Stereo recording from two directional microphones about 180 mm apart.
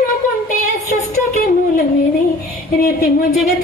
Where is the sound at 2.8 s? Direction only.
55° left (ahead or behind).